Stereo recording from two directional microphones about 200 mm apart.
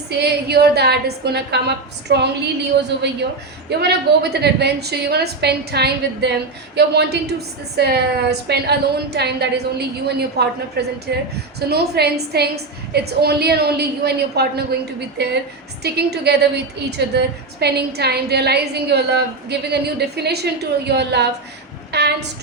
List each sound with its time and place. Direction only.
0.1 s a woman's voice: 55° right (ahead or behind)
3.7 s a woman's voice: 55° right (ahead or behind)